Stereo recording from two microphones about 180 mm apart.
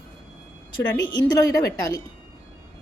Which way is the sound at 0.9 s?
20° left (ahead or behind).